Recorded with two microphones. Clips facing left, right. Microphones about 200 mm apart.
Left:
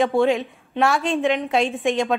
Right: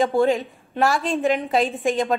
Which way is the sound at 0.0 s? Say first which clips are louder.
Even; centre (ahead or behind).